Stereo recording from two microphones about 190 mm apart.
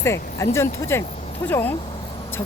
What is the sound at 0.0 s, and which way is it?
Speech, 15° left (ahead or behind).